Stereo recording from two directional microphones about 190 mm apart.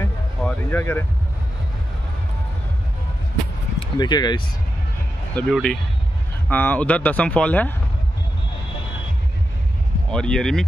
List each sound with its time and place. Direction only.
0.4 s a sound: 5° left (ahead or behind)
3.8 s speech: 20° left (ahead or behind)
5.3 s speech: 5° left (ahead or behind)
10.1 s speech: 5° left (ahead or behind)